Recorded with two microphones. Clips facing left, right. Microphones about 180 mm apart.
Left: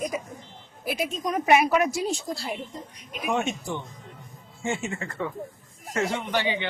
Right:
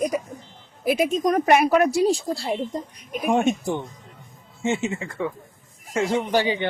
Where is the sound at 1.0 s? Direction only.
50° right (ahead or behind); by 2.6 s 30° right (ahead or behind).